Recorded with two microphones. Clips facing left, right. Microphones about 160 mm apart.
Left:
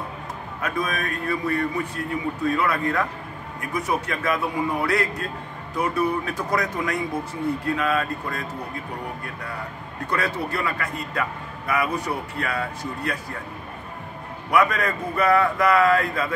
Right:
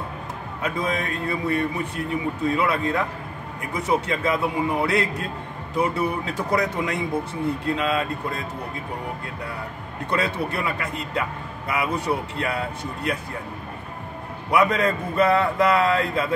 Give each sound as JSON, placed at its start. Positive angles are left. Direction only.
{"t": 0.6, "sound": "a man's voice", "side_deg": -25}
{"t": 10.0, "sound": "a man's voice", "side_deg": -25}
{"t": 14.5, "sound": "a man's voice", "side_deg": -25}